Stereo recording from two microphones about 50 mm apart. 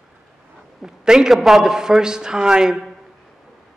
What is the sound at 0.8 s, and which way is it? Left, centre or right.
Speech, centre.